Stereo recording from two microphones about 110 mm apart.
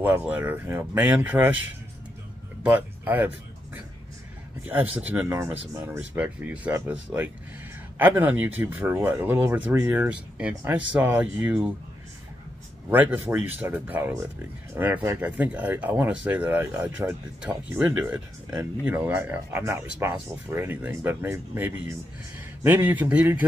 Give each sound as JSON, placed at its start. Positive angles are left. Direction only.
{"t": 0.2, "sound": "speech", "side_deg": -15}
{"t": 2.6, "sound": "speech", "side_deg": -15}
{"t": 12.9, "sound": "speech", "side_deg": -15}